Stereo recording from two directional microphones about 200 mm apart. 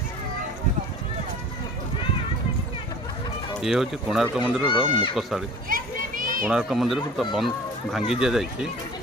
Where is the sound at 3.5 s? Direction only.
Centre (ahead or behind).